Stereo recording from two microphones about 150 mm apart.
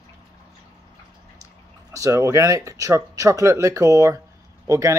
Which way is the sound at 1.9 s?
20° right (ahead or behind).